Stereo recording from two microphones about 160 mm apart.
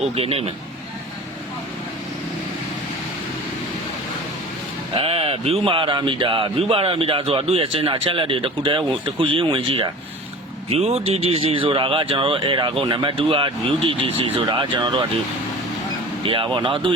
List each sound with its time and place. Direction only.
0.2 s speech: 40° right (ahead or behind)
4.9 s speech: 35° right (ahead or behind)
16.2 s speech: 35° right (ahead or behind)